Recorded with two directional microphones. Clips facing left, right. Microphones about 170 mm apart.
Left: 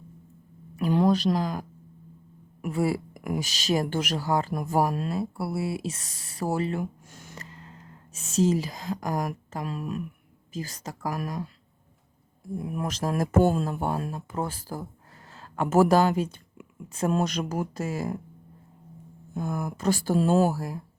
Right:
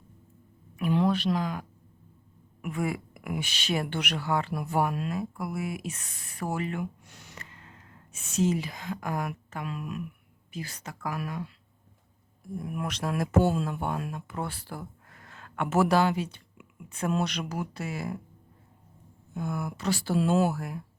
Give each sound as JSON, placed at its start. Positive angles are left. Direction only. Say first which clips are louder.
{"t": 0.8, "sound": "speech", "louder": "left 3 dB", "side_deg": 40}
{"t": 12.5, "sound": "speech", "louder": "left 3 dB", "side_deg": 30}
{"t": 19.3, "sound": "speech", "louder": "left 2 dB", "side_deg": 40}